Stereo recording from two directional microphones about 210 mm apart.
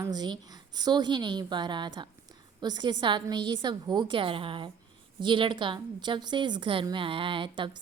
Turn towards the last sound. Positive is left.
turn(degrees=-20)  # may be behind; listen again after turning